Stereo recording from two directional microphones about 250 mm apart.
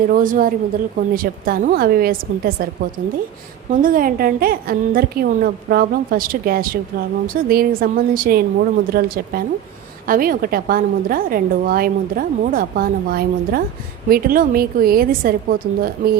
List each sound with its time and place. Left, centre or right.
0.1 s a woman's voice: right
3.7 s a woman's voice: right